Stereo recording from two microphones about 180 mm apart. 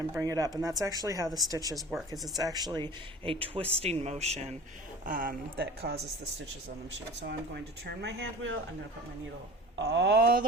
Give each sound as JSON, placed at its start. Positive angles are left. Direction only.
{"t": 0.1, "sound": "a woman's voice", "side_deg": -20}
{"t": 1.7, "sound": "speech", "side_deg": 0}
{"t": 2.4, "sound": "a woman's voice", "side_deg": -20}
{"t": 3.2, "sound": "speech", "side_deg": -30}
{"t": 5.0, "sound": "a woman's voice", "side_deg": -50}
{"t": 7.3, "sound": "speech", "side_deg": -65}
{"t": 9.7, "sound": "speech", "side_deg": -80}